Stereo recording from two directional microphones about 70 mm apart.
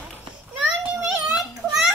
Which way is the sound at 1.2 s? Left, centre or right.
Centre.